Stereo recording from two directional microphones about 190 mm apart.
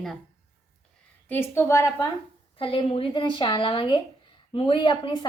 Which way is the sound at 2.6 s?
30° left (ahead or behind).